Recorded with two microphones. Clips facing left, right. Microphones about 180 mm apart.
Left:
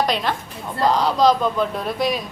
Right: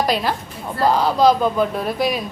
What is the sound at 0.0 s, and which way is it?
A woman's voice, 5° right (ahead or behind).